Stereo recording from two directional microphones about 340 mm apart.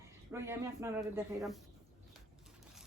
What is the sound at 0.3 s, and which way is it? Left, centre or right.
Speech, centre.